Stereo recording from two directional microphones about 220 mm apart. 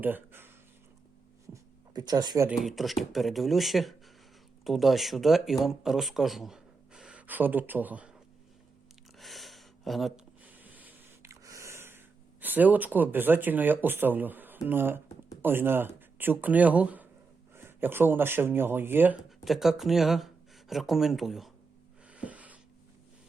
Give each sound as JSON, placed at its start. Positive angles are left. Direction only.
{"t": 0.0, "sound": "speech", "side_deg": -10}
{"t": 1.9, "sound": "speech", "side_deg": -20}
{"t": 2.5, "sound": "speech", "side_deg": 0}
{"t": 9.1, "sound": "a sound", "side_deg": 0}
{"t": 14.7, "sound": "speech", "side_deg": -10}
{"t": 22.0, "sound": "a sound", "side_deg": -5}